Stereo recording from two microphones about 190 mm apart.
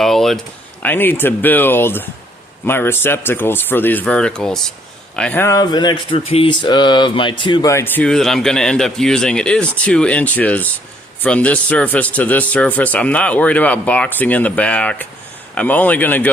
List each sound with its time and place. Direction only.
0.0 s speech: centre (ahead or behind)